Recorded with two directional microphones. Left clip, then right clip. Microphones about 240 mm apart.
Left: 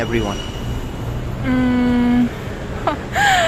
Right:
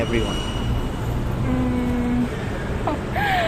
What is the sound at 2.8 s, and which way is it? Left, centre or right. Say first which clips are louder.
Gasp: left 7 dB; left.